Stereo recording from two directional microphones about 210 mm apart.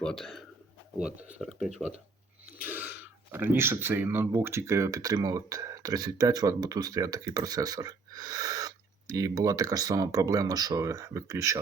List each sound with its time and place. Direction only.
0.0 s speech: centre (ahead or behind); by 11.6 s 15° right (ahead or behind)